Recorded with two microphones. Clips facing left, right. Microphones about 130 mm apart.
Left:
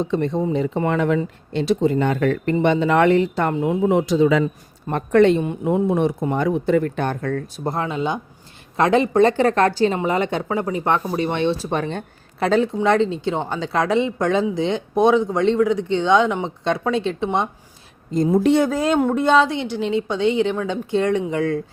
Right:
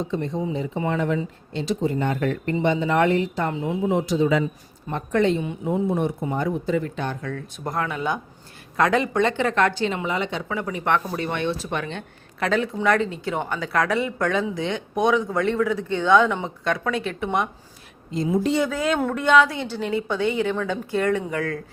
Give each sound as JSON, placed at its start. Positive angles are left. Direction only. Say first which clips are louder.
{"t": 0.1, "sound": "speech", "louder": "left 5 dB", "side_deg": 70}
{"t": 3.5, "sound": "speech", "louder": "left 6 dB", "side_deg": 55}
{"t": 4.9, "sound": "speech", "louder": "left 6 dB", "side_deg": 60}
{"t": 7.5, "sound": "speech", "louder": "left 3 dB", "side_deg": 30}
{"t": 15.3, "sound": "speech", "louder": "left 4 dB", "side_deg": 20}
{"t": 18.1, "sound": "a woman's voice", "louder": "left 5 dB", "side_deg": 45}
{"t": 18.4, "sound": "speech", "louder": "left 7 dB", "side_deg": 60}
{"t": 18.7, "sound": "speech", "louder": "left 5 dB", "side_deg": 40}
{"t": 19.5, "sound": "speech", "louder": "left 4 dB", "side_deg": 15}